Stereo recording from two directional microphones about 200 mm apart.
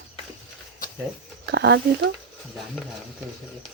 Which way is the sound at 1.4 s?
60° right (ahead or behind).